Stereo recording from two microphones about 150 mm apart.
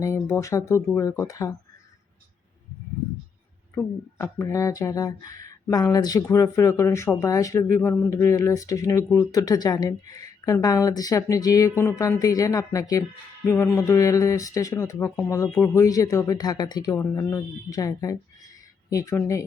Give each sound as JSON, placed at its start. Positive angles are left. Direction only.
{"t": 0.3, "sound": "speech", "side_deg": 20}
{"t": 4.2, "sound": "speech", "side_deg": 20}